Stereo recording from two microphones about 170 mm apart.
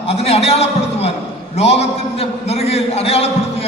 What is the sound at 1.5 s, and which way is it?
A man's voice, 40° left (ahead or behind).